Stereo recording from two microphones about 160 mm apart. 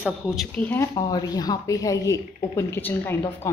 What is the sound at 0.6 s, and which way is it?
Speech, 10° left (ahead or behind).